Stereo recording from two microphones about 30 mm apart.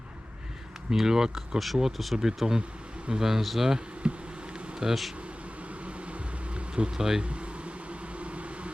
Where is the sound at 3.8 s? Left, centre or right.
Right.